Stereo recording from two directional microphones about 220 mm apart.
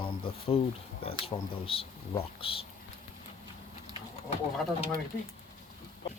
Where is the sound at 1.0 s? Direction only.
25° left (ahead or behind).